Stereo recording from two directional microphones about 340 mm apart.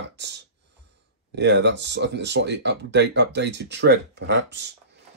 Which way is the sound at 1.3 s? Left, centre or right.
Right.